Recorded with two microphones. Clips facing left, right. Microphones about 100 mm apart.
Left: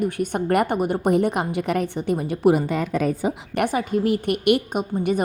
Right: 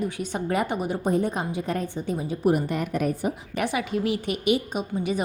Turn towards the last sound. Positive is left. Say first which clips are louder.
# left 4 dB
turn(degrees=50)  # may be behind; listen again after turning